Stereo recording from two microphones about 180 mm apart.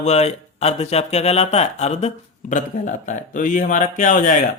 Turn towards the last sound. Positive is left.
turn(degrees=45)  # may be behind; listen again after turning